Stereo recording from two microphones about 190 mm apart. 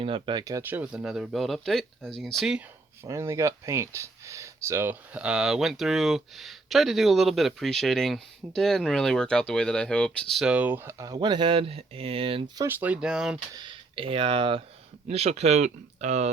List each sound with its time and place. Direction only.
0.0 s speech: 25° right (ahead or behind)
12.6 s speech: 5° right (ahead or behind)
13.6 s speech: 25° right (ahead or behind)